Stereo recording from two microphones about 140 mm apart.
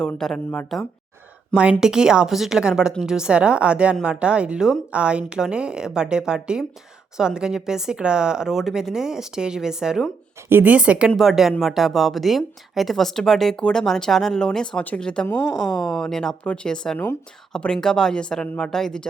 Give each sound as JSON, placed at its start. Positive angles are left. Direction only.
{"t": 0.0, "sound": "speech", "side_deg": 5}